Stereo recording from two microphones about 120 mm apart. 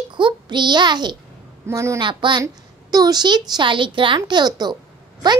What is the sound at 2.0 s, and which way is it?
A child's voice, 40° right (ahead or behind).